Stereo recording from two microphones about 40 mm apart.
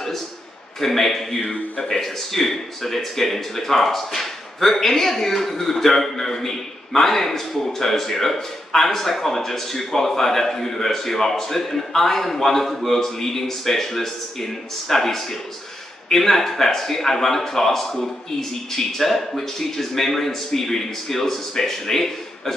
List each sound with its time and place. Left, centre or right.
0.7 s speech: centre